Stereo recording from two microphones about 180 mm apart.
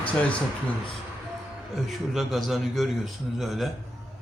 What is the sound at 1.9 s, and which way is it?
A man's voice, centre (ahead or behind).